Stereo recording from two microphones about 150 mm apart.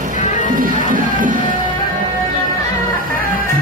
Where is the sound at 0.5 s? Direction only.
65° right (ahead or behind).